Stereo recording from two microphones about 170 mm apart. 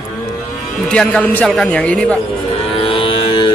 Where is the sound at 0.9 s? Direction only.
5° left (ahead or behind).